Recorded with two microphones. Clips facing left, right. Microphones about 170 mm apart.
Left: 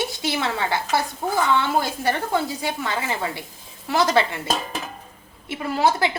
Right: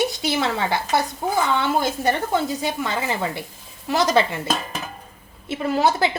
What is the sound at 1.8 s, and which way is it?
Speech, 20° right (ahead or behind).